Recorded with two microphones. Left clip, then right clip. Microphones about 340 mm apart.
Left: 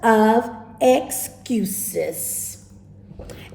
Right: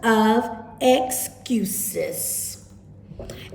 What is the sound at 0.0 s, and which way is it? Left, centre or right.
A woman's voice, centre.